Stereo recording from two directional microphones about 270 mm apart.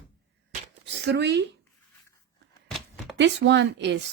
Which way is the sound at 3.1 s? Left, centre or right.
Right.